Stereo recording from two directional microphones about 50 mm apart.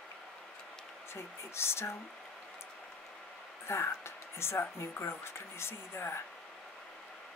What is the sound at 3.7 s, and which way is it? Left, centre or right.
Speech, left.